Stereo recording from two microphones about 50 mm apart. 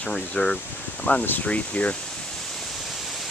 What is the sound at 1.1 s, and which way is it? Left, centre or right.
Speech, left.